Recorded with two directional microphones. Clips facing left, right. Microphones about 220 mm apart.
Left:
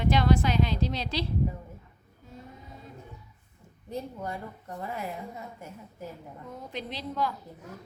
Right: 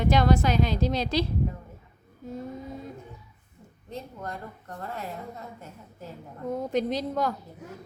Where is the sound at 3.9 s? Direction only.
10° left (ahead or behind).